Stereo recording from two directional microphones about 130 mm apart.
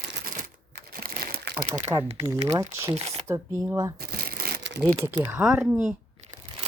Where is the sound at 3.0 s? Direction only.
50° right (ahead or behind).